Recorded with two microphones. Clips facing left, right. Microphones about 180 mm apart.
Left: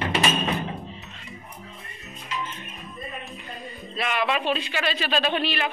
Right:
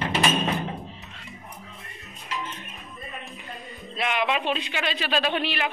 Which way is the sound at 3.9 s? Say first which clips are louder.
Even; 15° right (ahead or behind).